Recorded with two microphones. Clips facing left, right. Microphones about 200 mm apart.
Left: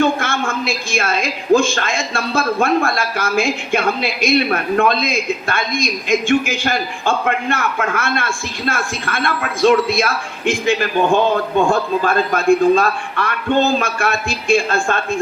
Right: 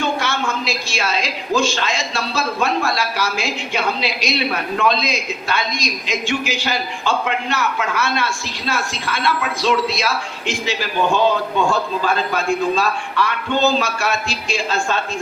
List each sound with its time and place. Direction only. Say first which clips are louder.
0.0 s a woman's voice: left 4 dB; 50° left (ahead or behind)